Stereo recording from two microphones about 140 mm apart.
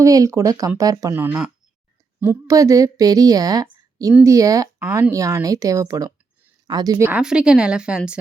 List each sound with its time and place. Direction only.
0.0 s a woman's voice: 25° right (ahead or behind)
7.1 s a woman's voice: 5° right (ahead or behind)